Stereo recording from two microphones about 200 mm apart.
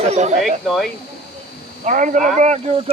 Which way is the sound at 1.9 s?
40° right (ahead or behind).